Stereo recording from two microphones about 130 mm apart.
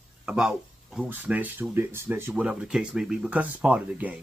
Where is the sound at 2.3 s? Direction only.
5° right (ahead or behind).